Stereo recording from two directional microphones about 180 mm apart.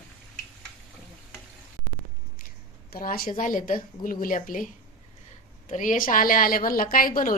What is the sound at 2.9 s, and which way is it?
A woman's voice, 50° left (ahead or behind).